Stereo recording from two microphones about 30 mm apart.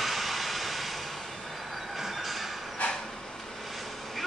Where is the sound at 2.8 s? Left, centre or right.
Left.